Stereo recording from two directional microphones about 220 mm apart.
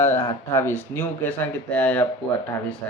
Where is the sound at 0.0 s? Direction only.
10° left (ahead or behind).